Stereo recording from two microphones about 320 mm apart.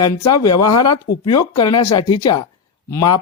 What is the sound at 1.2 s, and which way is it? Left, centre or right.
Speech, centre.